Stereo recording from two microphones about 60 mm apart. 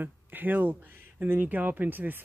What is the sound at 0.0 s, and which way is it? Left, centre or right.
Speech, right.